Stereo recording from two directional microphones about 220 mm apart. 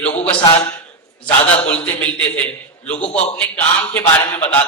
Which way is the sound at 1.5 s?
5° left (ahead or behind).